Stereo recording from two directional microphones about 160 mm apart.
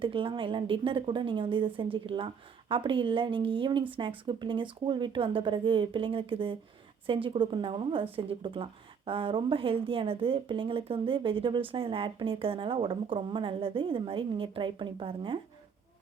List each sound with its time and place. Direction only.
0.0 s speech: 35° right (ahead or behind)